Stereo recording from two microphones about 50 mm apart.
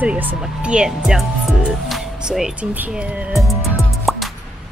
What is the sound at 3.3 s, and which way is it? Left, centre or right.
Music, centre.